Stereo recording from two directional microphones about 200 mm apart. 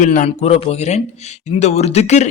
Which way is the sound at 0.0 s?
40° left (ahead or behind).